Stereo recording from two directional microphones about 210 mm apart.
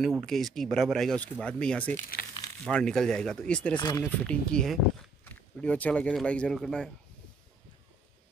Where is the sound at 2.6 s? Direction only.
5° left (ahead or behind).